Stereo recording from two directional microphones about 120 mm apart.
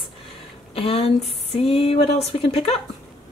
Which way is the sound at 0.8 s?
55° left (ahead or behind).